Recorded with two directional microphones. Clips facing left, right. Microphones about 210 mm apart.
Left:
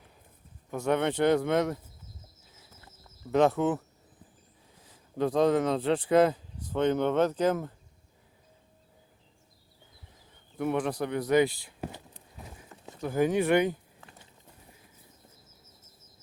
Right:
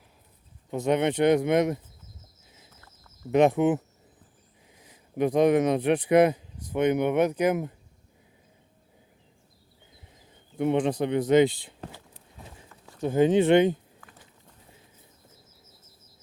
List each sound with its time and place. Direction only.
0.7 s speech: 20° right (ahead or behind)
3.3 s speech: 20° right (ahead or behind)
10.6 s speech: 20° right (ahead or behind)
11.8 s a sound: 20° left (ahead or behind)
13.0 s speech: 25° right (ahead or behind)